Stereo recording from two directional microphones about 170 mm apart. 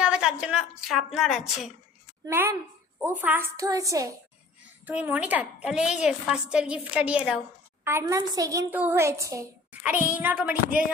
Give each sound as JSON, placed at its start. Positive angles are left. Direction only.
{"t": 0.0, "sound": "a woman's voice", "side_deg": -5}
{"t": 2.2, "sound": "a woman's voice", "side_deg": -15}
{"t": 4.6, "sound": "a woman's voice", "side_deg": -10}